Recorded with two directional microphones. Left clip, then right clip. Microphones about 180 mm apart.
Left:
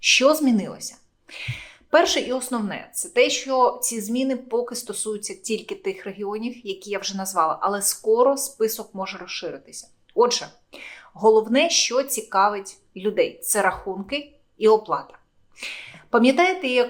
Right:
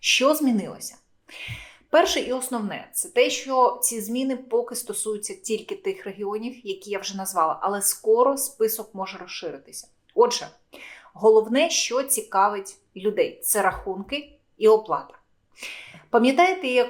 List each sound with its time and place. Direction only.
0.1 s speech: 15° left (ahead or behind)